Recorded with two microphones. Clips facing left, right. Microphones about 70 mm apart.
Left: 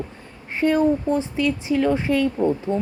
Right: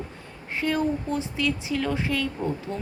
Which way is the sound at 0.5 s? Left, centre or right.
Left.